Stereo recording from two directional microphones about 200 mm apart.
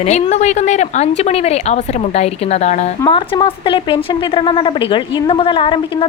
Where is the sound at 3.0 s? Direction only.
20° left (ahead or behind).